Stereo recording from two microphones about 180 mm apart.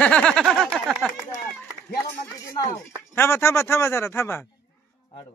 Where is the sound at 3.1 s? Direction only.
15° left (ahead or behind).